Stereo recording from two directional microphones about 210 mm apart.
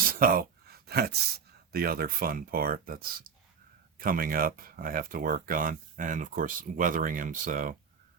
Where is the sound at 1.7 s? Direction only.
45° right (ahead or behind).